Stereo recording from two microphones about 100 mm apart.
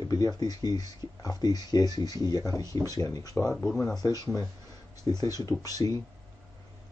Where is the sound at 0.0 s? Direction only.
35° left (ahead or behind).